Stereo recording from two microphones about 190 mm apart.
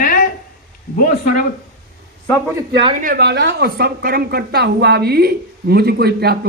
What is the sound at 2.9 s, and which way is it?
Speech, 45° right (ahead or behind).